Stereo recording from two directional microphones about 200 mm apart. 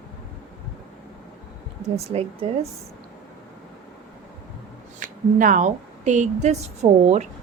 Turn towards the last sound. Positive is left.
turn(degrees=-35)  # may be behind; listen again after turning